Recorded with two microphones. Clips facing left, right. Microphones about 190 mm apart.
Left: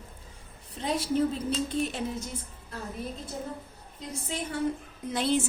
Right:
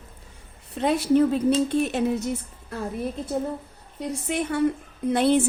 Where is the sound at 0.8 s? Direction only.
65° right (ahead or behind).